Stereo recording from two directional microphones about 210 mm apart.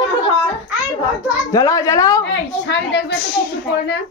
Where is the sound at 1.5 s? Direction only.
15° left (ahead or behind).